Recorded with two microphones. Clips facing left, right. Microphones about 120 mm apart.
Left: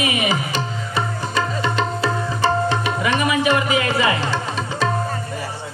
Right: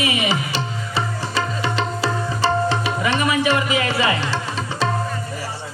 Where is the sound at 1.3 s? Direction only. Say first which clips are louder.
Left 2 dB; 30° right (ahead or behind).